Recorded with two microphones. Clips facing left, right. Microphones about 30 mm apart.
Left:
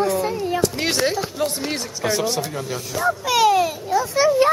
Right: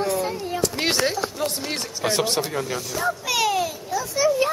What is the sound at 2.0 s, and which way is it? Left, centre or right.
Speech, right.